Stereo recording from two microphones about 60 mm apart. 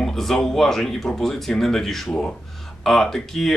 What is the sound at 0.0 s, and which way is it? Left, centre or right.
Speech, centre.